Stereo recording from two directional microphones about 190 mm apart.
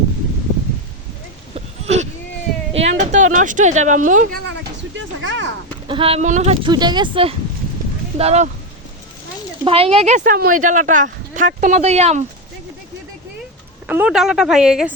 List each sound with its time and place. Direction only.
1.5 s a sound: 35° right (ahead or behind)
2.7 s speech: 35° right (ahead or behind)
4.4 s a sound: 70° right (ahead or behind)
5.9 s speech: 30° right (ahead or behind)
9.6 s speech: 30° right (ahead or behind)
13.8 s speech: 5° right (ahead or behind)